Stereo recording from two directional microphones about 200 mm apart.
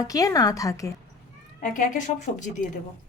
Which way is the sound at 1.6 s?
40° left (ahead or behind).